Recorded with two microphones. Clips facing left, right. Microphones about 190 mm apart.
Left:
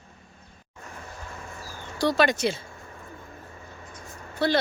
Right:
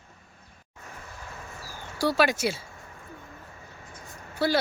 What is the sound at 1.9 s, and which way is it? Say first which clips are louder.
Speech: left 1 dB; 10° right (ahead or behind).